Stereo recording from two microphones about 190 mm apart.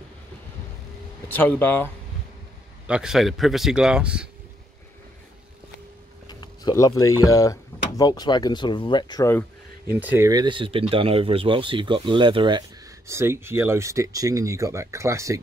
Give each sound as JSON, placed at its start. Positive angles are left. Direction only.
{"t": 1.3, "sound": "speech", "side_deg": 10}
{"t": 2.9, "sound": "a man's voice", "side_deg": -5}
{"t": 6.2, "sound": "a sound", "side_deg": 20}
{"t": 7.2, "sound": "speech", "side_deg": 20}
{"t": 9.9, "sound": "speech", "side_deg": -10}